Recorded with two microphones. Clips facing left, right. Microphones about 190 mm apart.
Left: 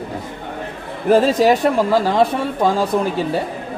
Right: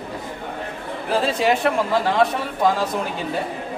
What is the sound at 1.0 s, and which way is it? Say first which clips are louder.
Speech: left 7 dB; 40° left (ahead or behind).